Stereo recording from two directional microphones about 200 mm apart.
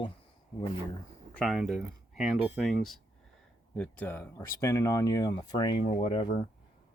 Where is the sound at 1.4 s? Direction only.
Centre (ahead or behind); by 6.2 s 25° left (ahead or behind).